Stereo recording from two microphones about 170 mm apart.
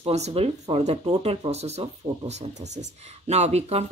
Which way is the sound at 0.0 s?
35° right (ahead or behind).